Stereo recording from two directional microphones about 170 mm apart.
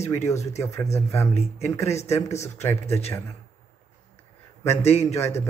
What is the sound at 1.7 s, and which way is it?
Speech, 15° left (ahead or behind).